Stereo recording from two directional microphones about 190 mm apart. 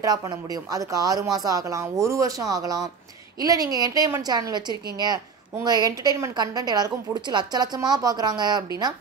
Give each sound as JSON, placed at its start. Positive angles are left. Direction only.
{"t": 0.0, "sound": "a woman's voice", "side_deg": -20}